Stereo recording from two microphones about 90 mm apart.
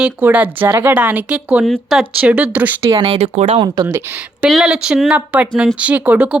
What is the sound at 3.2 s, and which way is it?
Speech, 90° right.